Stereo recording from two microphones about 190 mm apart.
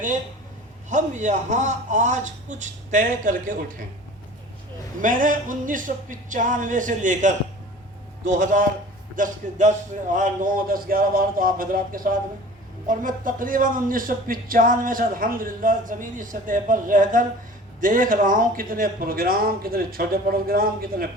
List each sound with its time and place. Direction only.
0.9 s a man's voice: 40° right (ahead or behind)
4.9 s a man's voice: 45° right (ahead or behind)